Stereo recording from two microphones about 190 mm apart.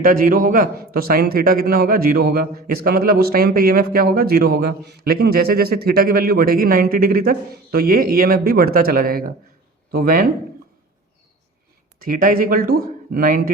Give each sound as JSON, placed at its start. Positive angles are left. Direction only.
{"t": 0.0, "sound": "a man's voice", "side_deg": -45}
{"t": 12.0, "sound": "a man's voice", "side_deg": -50}